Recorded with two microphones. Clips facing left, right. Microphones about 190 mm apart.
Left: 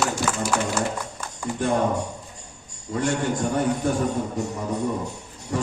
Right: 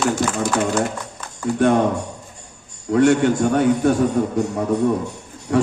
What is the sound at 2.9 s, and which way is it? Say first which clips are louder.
A man's voice: right 9 dB; 70° right (ahead or behind).